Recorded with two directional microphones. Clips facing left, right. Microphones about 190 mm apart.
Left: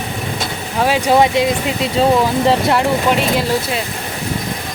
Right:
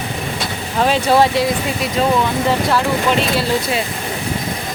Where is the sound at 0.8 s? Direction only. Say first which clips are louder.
Left 1 dB; 10° left (ahead or behind).